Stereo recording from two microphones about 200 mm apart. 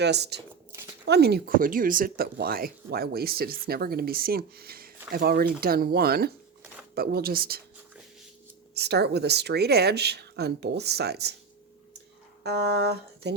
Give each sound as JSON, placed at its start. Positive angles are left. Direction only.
{"t": 0.0, "sound": "speech", "side_deg": -55}
{"t": 8.7, "sound": "speech", "side_deg": -55}
{"t": 12.4, "sound": "a sound", "side_deg": -55}